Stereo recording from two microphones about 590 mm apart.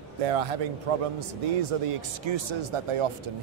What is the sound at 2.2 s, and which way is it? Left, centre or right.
Speech, right.